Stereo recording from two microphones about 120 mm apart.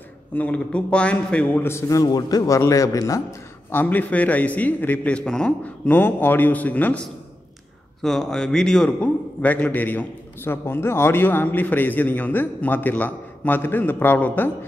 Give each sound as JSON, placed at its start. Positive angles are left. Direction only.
{"t": 0.3, "sound": "a man's voice", "side_deg": 10}
{"t": 3.8, "sound": "a man's voice", "side_deg": 15}
{"t": 8.0, "sound": "a man's voice", "side_deg": 5}